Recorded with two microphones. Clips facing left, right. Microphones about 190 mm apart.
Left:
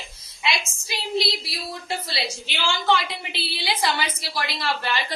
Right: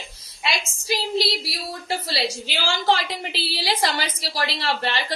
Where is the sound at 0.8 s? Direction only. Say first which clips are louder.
Right 3 dB; 35° right (ahead or behind).